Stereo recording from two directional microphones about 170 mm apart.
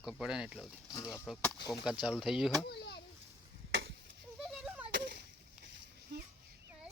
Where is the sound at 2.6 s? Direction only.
75° left (ahead or behind).